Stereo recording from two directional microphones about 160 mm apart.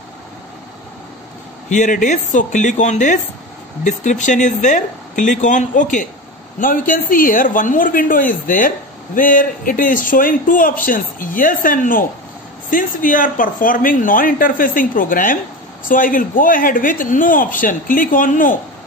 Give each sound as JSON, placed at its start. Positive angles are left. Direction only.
{"t": 1.7, "sound": "speech", "side_deg": 50}